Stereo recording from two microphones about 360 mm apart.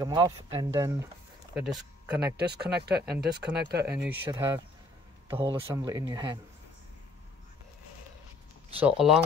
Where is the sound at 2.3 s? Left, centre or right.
Right.